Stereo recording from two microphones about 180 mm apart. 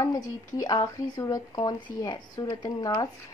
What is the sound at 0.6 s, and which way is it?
Speech, 20° left (ahead or behind).